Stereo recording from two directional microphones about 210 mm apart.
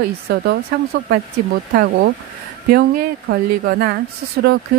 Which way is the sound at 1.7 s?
50° right (ahead or behind).